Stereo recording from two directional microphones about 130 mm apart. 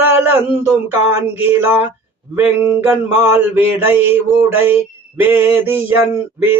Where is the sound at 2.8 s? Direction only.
15° right (ahead or behind).